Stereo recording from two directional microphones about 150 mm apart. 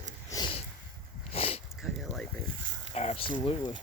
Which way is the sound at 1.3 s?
40° left (ahead or behind).